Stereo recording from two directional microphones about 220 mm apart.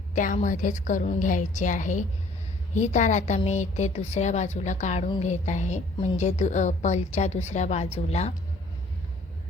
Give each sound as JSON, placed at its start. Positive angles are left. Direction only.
{"t": 0.1, "sound": "a woman's voice", "side_deg": 35}